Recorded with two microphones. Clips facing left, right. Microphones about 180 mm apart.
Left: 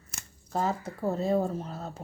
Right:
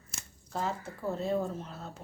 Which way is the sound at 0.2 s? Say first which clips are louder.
Left 5 dB; 45° left (ahead or behind).